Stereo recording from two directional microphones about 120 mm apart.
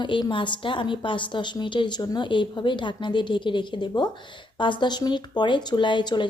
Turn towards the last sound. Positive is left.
turn(degrees=40)  # may be behind; listen again after turning